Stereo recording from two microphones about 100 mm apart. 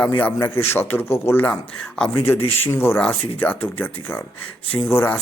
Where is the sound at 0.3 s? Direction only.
25° left (ahead or behind).